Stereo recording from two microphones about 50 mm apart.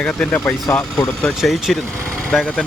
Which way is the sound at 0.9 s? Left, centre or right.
Centre.